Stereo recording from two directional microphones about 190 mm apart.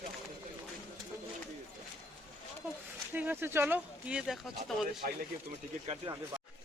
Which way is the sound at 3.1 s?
10° right (ahead or behind).